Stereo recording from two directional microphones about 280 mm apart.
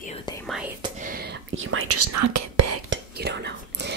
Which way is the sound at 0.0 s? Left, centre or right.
Centre.